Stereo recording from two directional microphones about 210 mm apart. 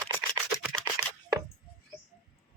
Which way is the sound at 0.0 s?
5° left (ahead or behind).